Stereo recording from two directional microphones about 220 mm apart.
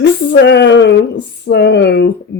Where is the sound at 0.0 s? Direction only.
55° left (ahead or behind).